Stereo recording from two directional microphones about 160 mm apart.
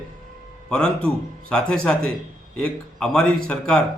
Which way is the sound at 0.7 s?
5° left (ahead or behind).